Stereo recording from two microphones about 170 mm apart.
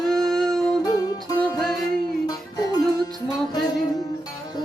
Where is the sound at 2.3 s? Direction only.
20° left (ahead or behind).